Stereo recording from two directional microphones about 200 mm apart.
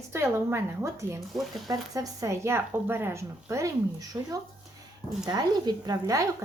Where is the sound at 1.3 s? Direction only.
Centre (ahead or behind).